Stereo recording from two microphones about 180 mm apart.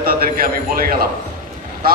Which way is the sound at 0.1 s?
55° right (ahead or behind).